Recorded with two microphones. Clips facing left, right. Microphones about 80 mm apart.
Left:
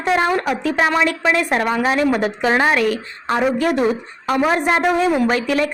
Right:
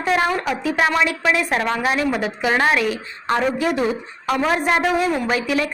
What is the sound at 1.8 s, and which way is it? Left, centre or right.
Speech, left.